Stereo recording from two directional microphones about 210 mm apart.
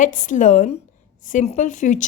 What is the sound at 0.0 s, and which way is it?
Speech, 40° left (ahead or behind).